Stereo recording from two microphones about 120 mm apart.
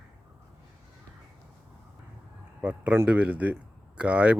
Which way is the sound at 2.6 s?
10° right (ahead or behind).